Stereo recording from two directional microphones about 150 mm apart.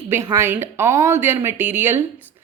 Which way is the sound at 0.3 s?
15° right (ahead or behind).